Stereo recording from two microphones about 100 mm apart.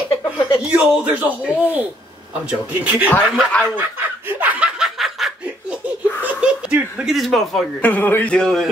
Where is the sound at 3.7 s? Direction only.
20° right (ahead or behind).